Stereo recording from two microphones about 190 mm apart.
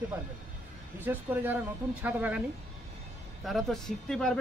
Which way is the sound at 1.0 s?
10° right (ahead or behind).